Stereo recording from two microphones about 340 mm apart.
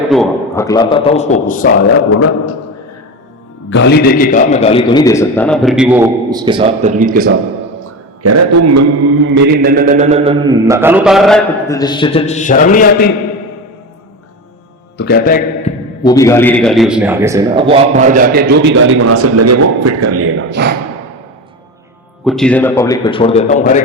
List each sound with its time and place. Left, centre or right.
0.1 s a man's voice: centre; by 1.7 s left
2.1 s a man's voice: left
3.7 s a man's voice: left; by 7.3 s right
7.8 s a sound: right
9.2 s speech: right; by 13.1 s left
14.9 s a man's voice: left
16.0 s a man's voice: centre; by 20.7 s right
22.2 s a man's voice: centre; by 23.8 s left